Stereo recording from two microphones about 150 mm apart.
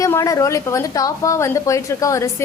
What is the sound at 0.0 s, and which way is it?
A woman's voice, 20° left (ahead or behind).